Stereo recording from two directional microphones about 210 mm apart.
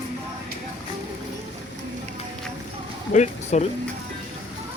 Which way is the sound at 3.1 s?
35° left (ahead or behind).